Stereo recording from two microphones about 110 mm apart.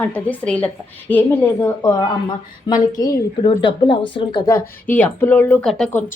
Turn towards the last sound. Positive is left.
turn(degrees=5)  # may be behind; listen again after turning